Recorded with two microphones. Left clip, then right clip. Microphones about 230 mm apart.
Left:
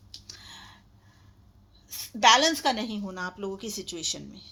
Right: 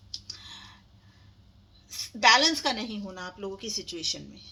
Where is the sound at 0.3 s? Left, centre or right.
Left.